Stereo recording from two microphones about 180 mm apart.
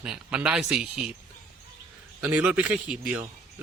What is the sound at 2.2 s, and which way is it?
A man's voice, 5° right (ahead or behind).